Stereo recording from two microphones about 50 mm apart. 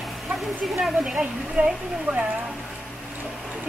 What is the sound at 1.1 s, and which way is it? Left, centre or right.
Speech, right.